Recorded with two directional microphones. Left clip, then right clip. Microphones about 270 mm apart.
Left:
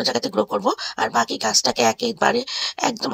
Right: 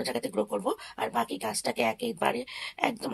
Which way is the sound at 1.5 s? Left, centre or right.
Left.